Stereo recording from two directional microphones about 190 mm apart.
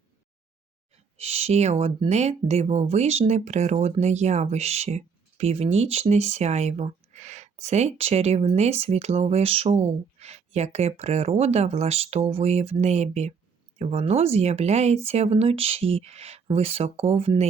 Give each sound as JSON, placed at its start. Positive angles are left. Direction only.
{"t": 1.1, "sound": "speech", "side_deg": -30}